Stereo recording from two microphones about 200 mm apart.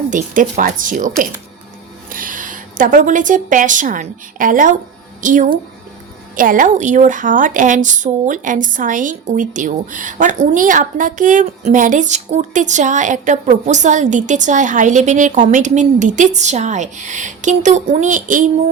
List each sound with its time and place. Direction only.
0.1 s a woman's voice: 40° right (ahead or behind)